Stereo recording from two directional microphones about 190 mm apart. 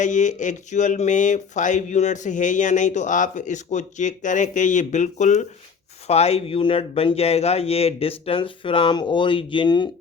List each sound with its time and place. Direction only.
0.0 s speech: 40° left (ahead or behind); by 9.9 s 25° left (ahead or behind)